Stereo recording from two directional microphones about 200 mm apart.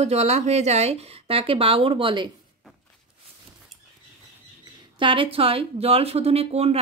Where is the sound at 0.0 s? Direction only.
35° right (ahead or behind).